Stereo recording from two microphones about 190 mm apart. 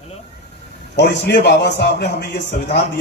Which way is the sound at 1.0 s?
60° left (ahead or behind).